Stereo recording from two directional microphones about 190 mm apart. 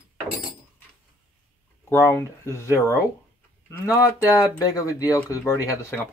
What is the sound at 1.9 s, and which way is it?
Speech, 10° left (ahead or behind).